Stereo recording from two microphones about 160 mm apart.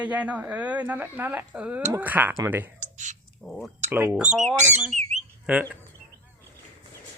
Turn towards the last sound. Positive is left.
turn(degrees=-10)  # may be behind; listen again after turning